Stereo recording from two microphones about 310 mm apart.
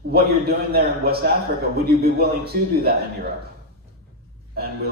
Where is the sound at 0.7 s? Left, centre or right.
Right.